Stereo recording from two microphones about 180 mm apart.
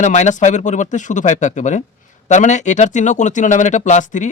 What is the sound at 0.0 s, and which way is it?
Speech, 40° left (ahead or behind).